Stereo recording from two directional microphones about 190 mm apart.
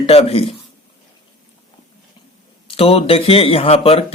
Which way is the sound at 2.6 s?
30° left (ahead or behind).